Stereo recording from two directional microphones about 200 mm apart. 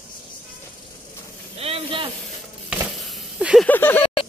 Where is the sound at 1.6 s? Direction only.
25° right (ahead or behind).